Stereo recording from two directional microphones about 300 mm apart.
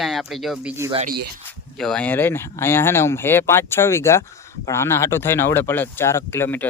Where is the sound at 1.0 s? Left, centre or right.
Right.